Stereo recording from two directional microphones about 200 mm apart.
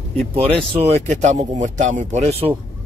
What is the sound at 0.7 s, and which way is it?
Speech, 35° right (ahead or behind).